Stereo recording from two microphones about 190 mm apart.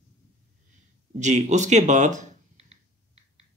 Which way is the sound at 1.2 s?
40° right (ahead or behind).